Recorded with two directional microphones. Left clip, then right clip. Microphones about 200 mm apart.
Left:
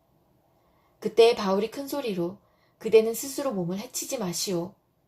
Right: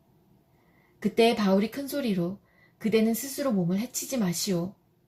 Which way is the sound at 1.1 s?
30° left (ahead or behind).